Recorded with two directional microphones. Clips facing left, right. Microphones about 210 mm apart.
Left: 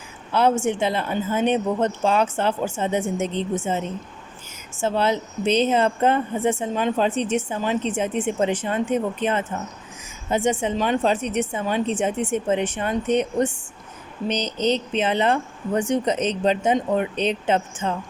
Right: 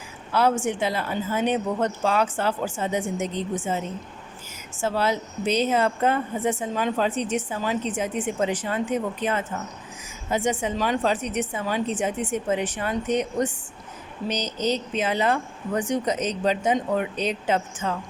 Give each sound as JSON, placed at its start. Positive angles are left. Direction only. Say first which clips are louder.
{"t": 0.3, "sound": "a woman's voice", "louder": "left 2 dB", "side_deg": 25}
{"t": 4.8, "sound": "a woman's voice", "louder": "left 3 dB", "side_deg": 25}
{"t": 14.4, "sound": "speech", "louder": "left 3 dB", "side_deg": -10}
{"t": 14.9, "sound": "a woman's voice", "louder": "left 3 dB", "side_deg": 25}